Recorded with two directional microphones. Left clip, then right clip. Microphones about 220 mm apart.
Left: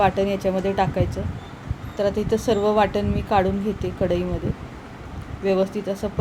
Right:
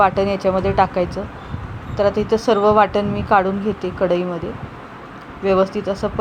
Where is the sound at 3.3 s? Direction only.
5° right (ahead or behind).